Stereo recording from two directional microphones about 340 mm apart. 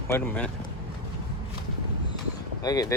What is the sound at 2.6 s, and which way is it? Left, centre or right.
Speech, centre.